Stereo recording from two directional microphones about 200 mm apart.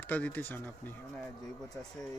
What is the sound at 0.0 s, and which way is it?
Speech, 10° left (ahead or behind).